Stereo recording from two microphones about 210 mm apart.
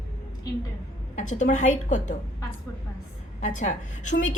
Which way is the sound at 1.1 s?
35° left (ahead or behind).